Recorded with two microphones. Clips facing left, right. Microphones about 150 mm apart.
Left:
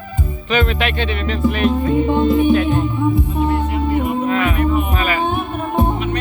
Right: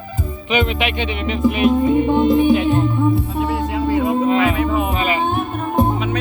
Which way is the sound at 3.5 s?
90° right.